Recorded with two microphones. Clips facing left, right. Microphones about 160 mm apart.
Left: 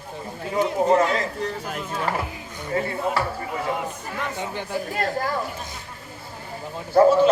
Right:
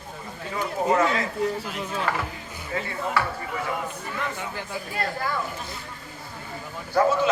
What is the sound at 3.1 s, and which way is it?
Speech, 30° left (ahead or behind).